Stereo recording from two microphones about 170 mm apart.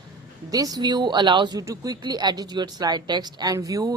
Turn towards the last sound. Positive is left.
turn(degrees=-20)  # may be behind; listen again after turning